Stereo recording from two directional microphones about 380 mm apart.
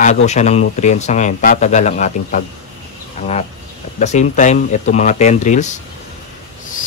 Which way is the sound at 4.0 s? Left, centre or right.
Centre.